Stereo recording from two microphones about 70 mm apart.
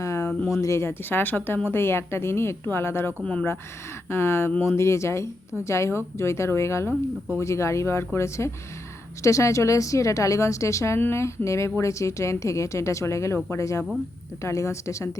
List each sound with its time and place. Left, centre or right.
0.0 s a sound: left
0.6 s a woman's voice: left
4.1 s a woman's voice: left